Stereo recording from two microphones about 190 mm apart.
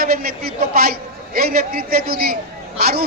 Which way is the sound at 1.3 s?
50° right (ahead or behind).